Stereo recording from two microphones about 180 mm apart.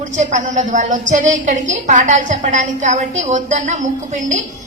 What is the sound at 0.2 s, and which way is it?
A woman's voice, 40° right (ahead or behind).